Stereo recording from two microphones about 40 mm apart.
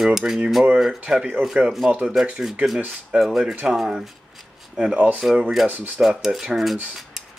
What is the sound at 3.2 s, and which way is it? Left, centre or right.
Speech, centre.